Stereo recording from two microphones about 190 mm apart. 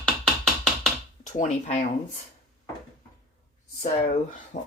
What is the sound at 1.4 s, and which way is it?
Speech, 40° left (ahead or behind).